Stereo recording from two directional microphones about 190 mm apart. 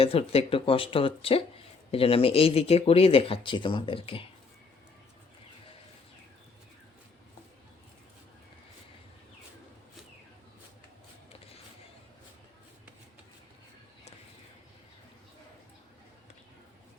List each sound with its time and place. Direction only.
0.0 s speech: 30° left (ahead or behind)